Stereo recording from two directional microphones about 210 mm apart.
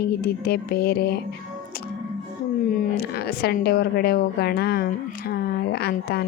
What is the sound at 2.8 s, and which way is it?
A child's voice, 50° left (ahead or behind).